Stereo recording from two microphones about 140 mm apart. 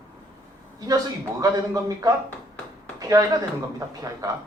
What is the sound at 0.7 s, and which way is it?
A man's voice, 25° right (ahead or behind).